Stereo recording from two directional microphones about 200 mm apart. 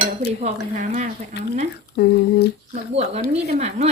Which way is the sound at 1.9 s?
55° left (ahead or behind).